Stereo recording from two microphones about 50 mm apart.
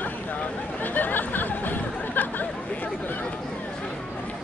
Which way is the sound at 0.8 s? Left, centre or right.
Left.